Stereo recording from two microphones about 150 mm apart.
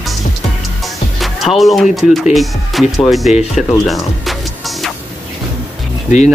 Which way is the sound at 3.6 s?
Centre (ahead or behind).